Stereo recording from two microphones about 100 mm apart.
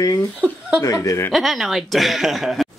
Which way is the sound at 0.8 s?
35° left (ahead or behind).